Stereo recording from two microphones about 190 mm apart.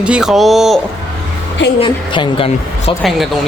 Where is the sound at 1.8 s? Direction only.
25° left (ahead or behind).